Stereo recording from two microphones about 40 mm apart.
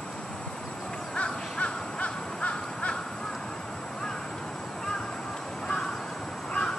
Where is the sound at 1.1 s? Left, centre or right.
Left.